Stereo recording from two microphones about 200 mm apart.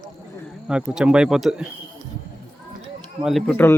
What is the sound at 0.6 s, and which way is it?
Speech, 5° right (ahead or behind).